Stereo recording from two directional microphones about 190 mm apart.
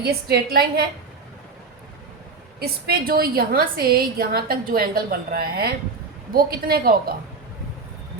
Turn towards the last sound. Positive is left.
turn(degrees=-50)  # may be behind; listen again after turning